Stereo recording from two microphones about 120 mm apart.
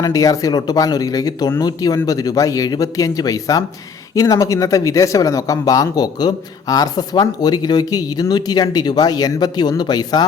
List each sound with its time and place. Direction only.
0.0 s speech: 30° left (ahead or behind)